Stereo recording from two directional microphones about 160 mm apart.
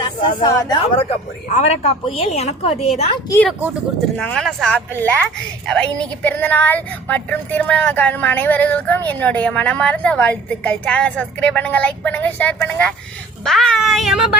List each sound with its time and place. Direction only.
0.0 s speech: 25° left (ahead or behind)
1.5 s a woman's voice: 45° left (ahead or behind)
4.2 s a woman's voice: 5° left (ahead or behind)